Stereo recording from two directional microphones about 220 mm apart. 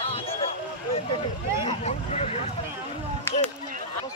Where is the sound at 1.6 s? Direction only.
30° left (ahead or behind).